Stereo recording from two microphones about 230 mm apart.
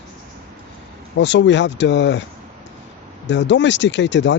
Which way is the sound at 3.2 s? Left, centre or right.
Left.